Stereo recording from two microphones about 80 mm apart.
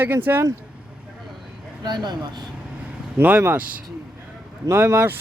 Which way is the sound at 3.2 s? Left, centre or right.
Right.